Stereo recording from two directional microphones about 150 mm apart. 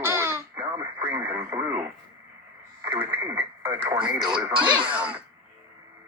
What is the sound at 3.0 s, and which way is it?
Radio, 10° right (ahead or behind).